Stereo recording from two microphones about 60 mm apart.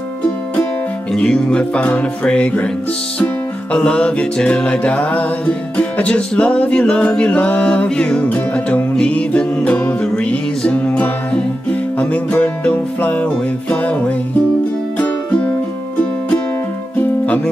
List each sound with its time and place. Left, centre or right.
1.1 s music: centre
3.7 s music: centre
12.0 s music: left